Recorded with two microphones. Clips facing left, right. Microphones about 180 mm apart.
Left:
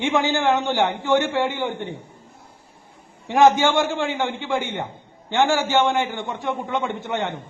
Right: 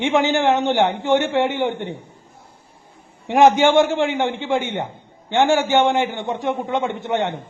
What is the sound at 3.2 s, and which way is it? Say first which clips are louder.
A man's voice: right 2 dB; 20° right (ahead or behind).